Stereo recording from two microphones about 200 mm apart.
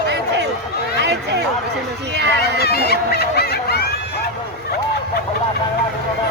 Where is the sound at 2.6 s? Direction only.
50° left (ahead or behind).